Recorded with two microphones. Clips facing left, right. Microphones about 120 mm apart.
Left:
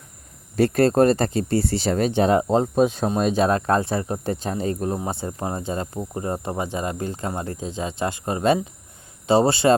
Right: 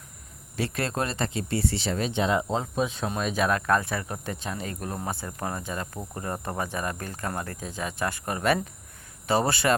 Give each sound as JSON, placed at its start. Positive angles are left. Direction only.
{"t": 0.5, "sound": "speech", "side_deg": 45}